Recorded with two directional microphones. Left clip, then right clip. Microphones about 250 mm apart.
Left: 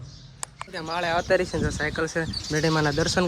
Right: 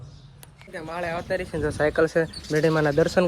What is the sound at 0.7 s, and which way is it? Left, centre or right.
Speech, centre.